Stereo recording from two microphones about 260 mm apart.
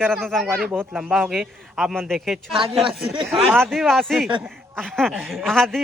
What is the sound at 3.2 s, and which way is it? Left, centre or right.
A man's voice, centre.